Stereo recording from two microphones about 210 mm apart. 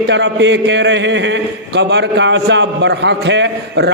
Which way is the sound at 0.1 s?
60° right (ahead or behind).